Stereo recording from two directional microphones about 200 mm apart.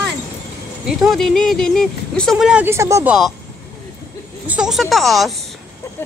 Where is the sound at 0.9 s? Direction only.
Centre (ahead or behind).